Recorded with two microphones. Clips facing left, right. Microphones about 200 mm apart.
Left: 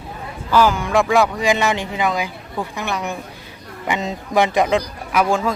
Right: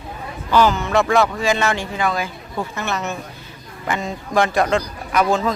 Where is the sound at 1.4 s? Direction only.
15° left (ahead or behind).